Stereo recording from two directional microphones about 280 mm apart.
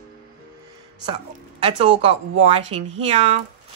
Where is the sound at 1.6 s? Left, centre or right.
Right.